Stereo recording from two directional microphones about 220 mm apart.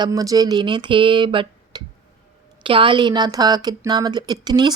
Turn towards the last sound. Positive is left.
turn(degrees=-20)  # may be behind; listen again after turning